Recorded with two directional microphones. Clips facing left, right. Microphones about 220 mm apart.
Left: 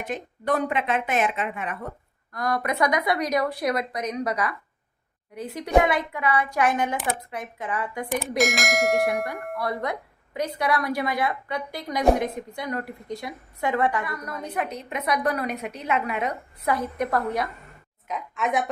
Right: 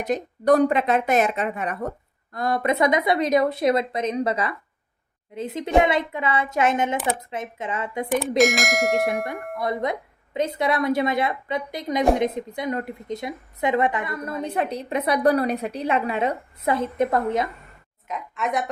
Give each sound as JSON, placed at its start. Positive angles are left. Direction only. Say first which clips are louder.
{"t": 0.0, "sound": "speech", "louder": "right 7 dB", "side_deg": -40}
{"t": 2.3, "sound": "a woman's voice", "louder": "right 4 dB", "side_deg": -25}
{"t": 8.4, "sound": "speech", "louder": "right 3 dB", "side_deg": 0}
{"t": 9.6, "sound": "a woman's voice", "louder": "right 4 dB", "side_deg": -20}
{"t": 18.1, "sound": "speech", "louder": "even", "side_deg": 0}